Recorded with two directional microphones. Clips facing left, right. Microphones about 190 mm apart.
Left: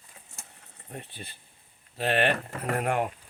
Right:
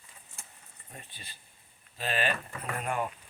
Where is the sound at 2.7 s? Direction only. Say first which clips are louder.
Left 6 dB; 70° left (ahead or behind).